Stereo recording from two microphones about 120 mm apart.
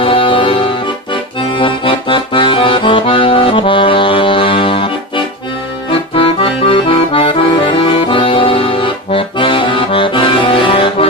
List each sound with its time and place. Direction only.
0.0 s music: 45° left (ahead or behind)
1.1 s accordion: 45° left (ahead or behind)